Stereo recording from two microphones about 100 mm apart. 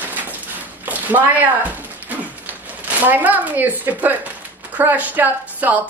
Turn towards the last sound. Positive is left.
turn(degrees=-15)  # may be behind; listen again after turning